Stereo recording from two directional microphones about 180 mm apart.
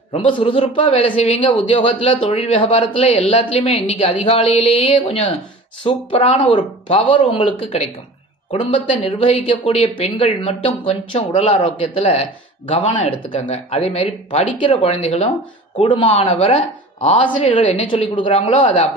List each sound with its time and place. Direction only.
0.1 s speech: 30° left (ahead or behind)